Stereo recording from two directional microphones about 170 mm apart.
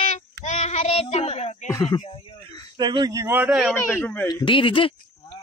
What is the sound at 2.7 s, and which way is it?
Speech, 25° right (ahead or behind).